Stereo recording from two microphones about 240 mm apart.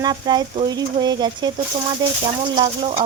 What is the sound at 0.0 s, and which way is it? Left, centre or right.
Speech, centre.